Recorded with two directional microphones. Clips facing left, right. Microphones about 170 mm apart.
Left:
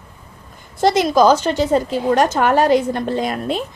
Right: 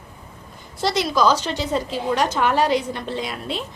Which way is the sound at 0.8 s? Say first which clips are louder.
Left 6 dB; 50° left (ahead or behind).